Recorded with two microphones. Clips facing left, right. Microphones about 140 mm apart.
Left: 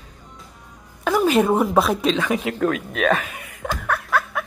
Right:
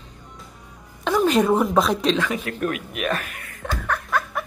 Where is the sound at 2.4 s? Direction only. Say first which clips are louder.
Left 4 dB; 90° left.